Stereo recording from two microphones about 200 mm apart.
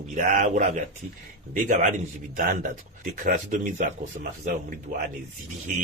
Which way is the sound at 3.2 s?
40° right (ahead or behind).